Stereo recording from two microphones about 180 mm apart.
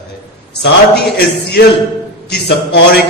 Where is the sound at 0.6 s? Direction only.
65° left (ahead or behind).